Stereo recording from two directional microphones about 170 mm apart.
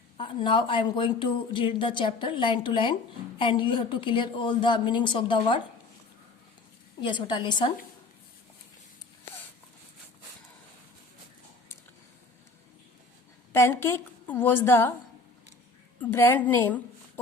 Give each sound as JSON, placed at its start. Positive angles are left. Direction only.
{"t": 0.2, "sound": "speech", "side_deg": 30}
{"t": 7.0, "sound": "speech", "side_deg": 25}
{"t": 13.5, "sound": "a woman's voice", "side_deg": 15}
{"t": 16.0, "sound": "a woman's voice", "side_deg": 15}